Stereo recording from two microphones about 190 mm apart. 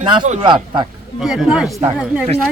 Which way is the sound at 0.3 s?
30° right (ahead or behind).